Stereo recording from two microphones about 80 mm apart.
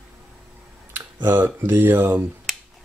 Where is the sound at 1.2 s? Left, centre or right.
Right.